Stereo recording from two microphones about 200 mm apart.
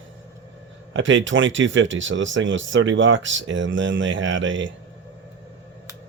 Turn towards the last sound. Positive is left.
turn(degrees=-70)  # may be behind; listen again after turning